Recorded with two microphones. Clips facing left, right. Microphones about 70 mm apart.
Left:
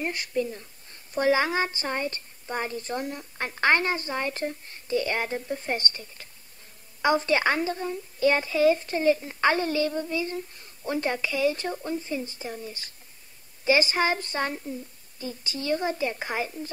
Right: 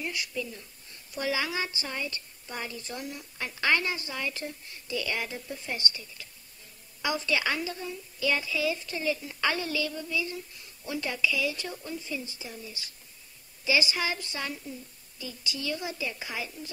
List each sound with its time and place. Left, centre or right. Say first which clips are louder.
0.0 s a woman's voice: left 6 dB; left